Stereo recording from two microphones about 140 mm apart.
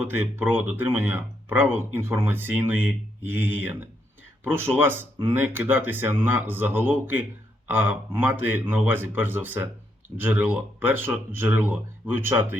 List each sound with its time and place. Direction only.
0.0 s speech: 15° right (ahead or behind)